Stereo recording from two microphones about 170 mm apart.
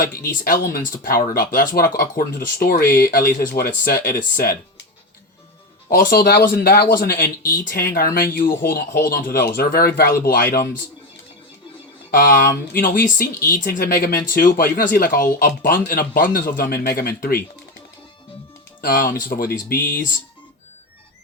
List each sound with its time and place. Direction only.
0.4 s speech: 55° left (ahead or behind)
5.9 s speech: 60° left (ahead or behind)
12.7 s speech: 55° left (ahead or behind)
18.8 s speech: 55° left (ahead or behind)